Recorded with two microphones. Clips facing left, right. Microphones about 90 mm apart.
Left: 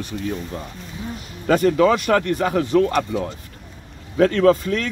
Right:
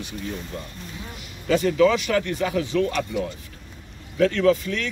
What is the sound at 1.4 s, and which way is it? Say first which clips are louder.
Speech: left 3 dB; 50° left (ahead or behind).